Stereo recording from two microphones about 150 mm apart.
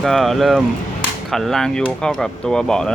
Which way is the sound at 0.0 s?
Centre (ahead or behind).